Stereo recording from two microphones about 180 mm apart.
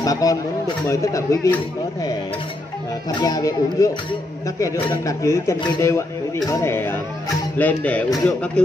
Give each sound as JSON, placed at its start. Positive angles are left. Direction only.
{"t": 0.0, "sound": "speech", "side_deg": 20}
{"t": 3.2, "sound": "a man's voice", "side_deg": 20}